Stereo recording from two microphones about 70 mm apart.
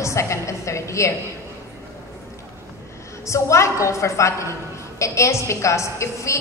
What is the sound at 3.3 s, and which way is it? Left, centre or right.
A woman's voice, left.